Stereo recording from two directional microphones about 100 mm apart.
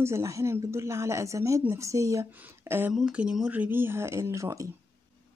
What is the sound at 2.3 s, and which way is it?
Speech, 20° right (ahead or behind).